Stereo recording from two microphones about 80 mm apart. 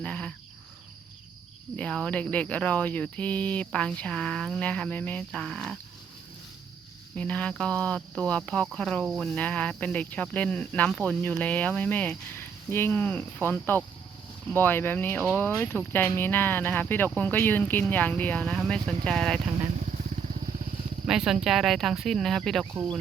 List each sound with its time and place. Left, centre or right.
0.0 s cricket: centre
1.7 s speech: centre
7.2 s speech: centre
9.3 s speech: centre
21.1 s speech: centre